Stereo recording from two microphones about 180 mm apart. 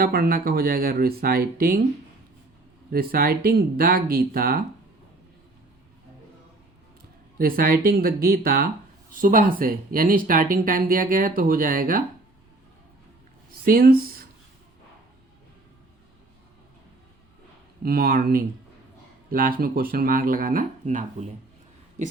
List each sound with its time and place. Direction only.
0.0 s speech: 55° right (ahead or behind)
2.9 s speech: 55° right (ahead or behind)
7.3 s speech: 55° right (ahead or behind)
13.7 s speech: 55° right (ahead or behind)
17.8 s speech: 55° right (ahead or behind)